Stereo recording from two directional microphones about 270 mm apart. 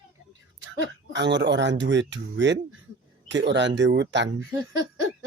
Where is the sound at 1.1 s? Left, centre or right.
Right.